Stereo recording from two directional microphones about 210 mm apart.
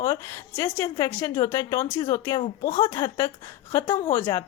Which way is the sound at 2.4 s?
35° left (ahead or behind).